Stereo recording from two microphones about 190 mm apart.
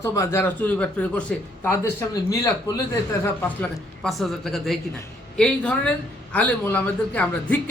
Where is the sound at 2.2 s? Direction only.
20° left (ahead or behind).